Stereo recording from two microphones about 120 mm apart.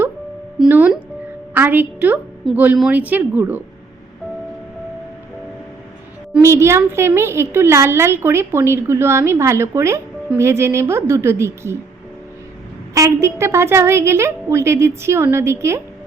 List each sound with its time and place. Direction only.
0.6 s speech: 5° right (ahead or behind)
1.5 s a woman's voice: 15° right (ahead or behind)
2.5 s speech: centre (ahead or behind)
2.9 s speech: 15° right (ahead or behind)
6.4 s a woman's voice: 25° right (ahead or behind)
12.9 s a woman's voice: 25° right (ahead or behind)